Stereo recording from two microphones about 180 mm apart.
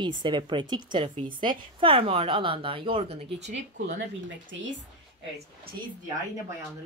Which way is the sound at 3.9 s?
90° right.